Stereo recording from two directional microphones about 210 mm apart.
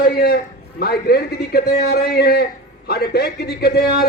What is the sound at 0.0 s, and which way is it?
A man's voice, 50° left (ahead or behind).